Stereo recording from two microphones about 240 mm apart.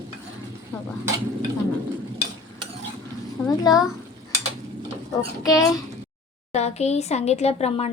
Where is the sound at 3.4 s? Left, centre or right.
Centre.